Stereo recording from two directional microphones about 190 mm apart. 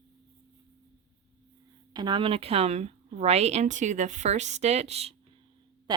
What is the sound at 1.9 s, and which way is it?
Speech, 25° right (ahead or behind).